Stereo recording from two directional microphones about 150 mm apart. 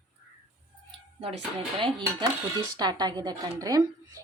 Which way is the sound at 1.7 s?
35° right (ahead or behind).